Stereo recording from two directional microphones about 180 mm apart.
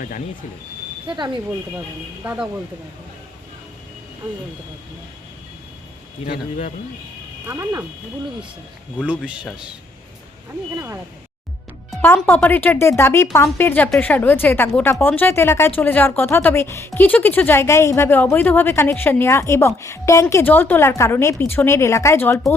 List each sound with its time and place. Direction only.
1.0 s speech: 25° right (ahead or behind)
2.2 s speech: 10° right (ahead or behind)
6.2 s a man's voice: 30° left (ahead or behind)
7.4 s speech: 15° right (ahead or behind)
9.0 s a man's voice: 5° right (ahead or behind)
10.8 s speech: 15° right (ahead or behind)
12.0 s speech: 10° left (ahead or behind)